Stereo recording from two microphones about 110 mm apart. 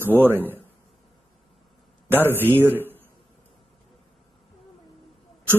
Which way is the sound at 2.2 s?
20° left (ahead or behind).